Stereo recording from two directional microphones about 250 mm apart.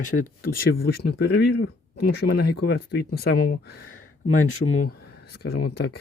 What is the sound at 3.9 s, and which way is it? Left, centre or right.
Speech, left.